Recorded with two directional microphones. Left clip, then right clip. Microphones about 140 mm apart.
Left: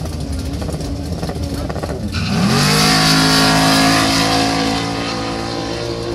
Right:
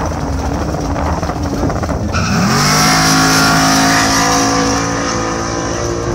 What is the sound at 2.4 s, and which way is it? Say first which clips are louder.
Vehicle: right 2 dB; 20° left (ahead or behind).